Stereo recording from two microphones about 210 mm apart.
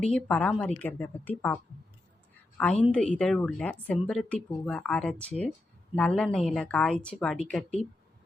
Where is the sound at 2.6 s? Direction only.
5° left (ahead or behind).